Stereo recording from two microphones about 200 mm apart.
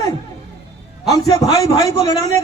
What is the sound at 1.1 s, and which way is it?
A man's voice, 15° left (ahead or behind).